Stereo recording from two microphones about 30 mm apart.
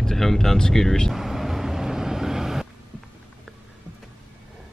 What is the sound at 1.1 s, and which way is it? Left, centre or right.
Vehicle, centre.